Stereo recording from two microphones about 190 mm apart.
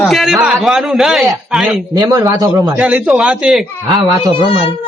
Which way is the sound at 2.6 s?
5° right (ahead or behind).